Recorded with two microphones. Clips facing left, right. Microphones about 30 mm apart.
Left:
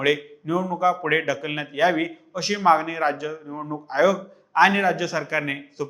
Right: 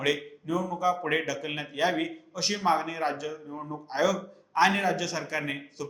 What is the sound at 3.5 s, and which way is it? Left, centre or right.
Speech, left.